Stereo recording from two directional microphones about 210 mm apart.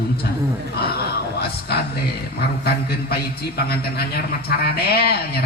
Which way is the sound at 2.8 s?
50° left (ahead or behind).